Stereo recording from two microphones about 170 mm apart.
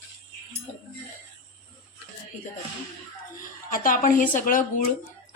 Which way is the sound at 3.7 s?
55° left (ahead or behind).